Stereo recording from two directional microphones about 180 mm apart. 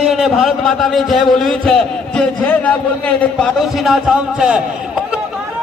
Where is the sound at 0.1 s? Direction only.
Centre (ahead or behind).